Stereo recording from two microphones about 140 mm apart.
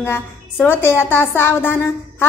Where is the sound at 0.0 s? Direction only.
15° left (ahead or behind).